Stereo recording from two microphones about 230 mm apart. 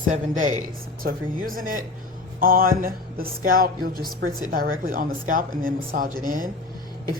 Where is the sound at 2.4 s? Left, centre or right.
Right.